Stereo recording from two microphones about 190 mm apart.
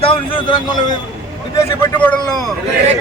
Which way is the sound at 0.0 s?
25° left (ahead or behind).